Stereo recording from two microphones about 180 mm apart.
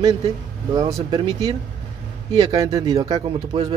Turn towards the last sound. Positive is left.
turn(degrees=-25)  # may be behind; listen again after turning